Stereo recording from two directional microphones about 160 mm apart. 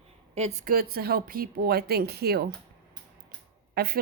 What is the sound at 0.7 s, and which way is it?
Speech, 70° right (ahead or behind).